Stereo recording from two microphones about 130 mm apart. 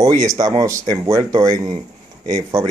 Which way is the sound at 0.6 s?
25° right (ahead or behind).